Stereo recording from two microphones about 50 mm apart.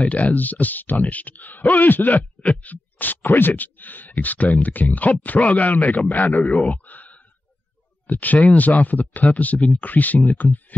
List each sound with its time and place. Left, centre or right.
0.1 s speech: left